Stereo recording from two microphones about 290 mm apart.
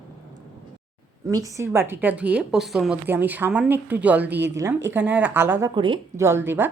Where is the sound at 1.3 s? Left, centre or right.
Centre.